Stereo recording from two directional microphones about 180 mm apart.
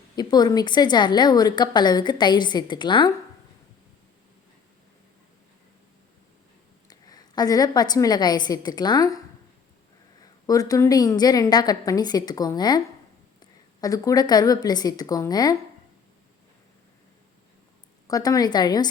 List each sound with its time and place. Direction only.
0.2 s a woman's voice: 25° left (ahead or behind)
6.8 s a woman's voice: 20° left (ahead or behind)
10.4 s a woman's voice: 20° left (ahead or behind)
18.1 s a woman's voice: 20° left (ahead or behind)